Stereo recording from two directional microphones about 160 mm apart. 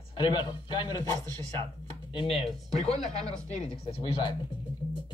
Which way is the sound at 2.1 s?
35° left (ahead or behind).